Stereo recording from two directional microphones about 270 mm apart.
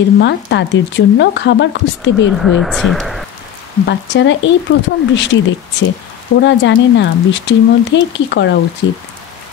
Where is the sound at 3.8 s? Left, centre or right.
Left.